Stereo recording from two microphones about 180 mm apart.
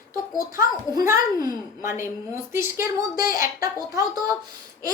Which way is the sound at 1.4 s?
15° right (ahead or behind).